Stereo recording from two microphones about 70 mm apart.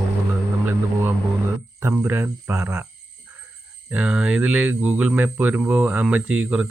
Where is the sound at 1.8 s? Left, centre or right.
Right.